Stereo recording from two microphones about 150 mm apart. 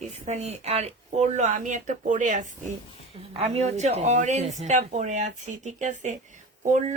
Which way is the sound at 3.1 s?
40° right (ahead or behind).